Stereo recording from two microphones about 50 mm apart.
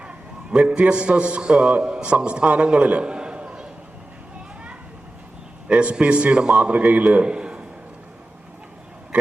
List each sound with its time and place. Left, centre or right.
0.0 s a sound: right
0.7 s a man's voice: right
5.6 s a man's voice: right